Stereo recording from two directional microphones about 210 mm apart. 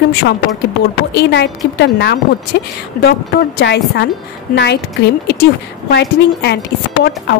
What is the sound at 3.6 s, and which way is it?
Speech, 50° left (ahead or behind).